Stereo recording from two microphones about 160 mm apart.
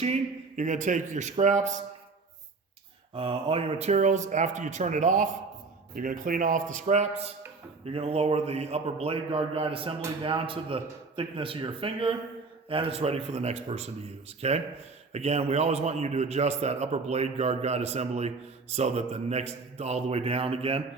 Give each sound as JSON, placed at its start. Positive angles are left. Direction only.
{"t": 0.0, "sound": "a man's voice", "side_deg": -45}
{"t": 3.2, "sound": "a man's voice", "side_deg": -35}